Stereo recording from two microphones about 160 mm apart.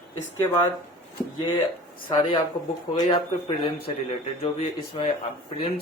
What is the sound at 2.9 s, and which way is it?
Speech, 30° left (ahead or behind).